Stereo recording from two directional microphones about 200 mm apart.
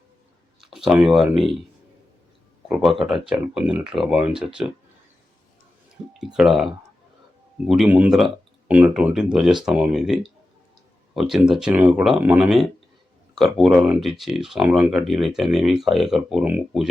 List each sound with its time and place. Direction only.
0.6 s speech: centre (ahead or behind)
2.6 s speech: 5° right (ahead or behind)
6.1 s speech: centre (ahead or behind)
7.7 s speech: 5° right (ahead or behind)